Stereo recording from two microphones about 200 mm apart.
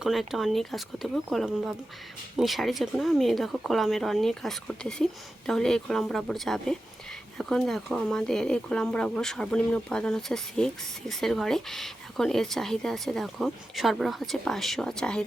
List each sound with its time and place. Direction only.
0.0 s speech: centre (ahead or behind)